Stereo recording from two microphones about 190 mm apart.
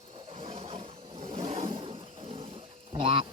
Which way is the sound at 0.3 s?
30° right (ahead or behind).